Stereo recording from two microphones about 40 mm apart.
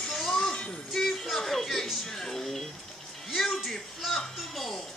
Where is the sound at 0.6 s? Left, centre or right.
Left.